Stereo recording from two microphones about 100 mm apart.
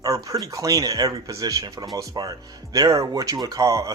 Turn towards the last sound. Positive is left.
turn(degrees=-30)  # may be behind; listen again after turning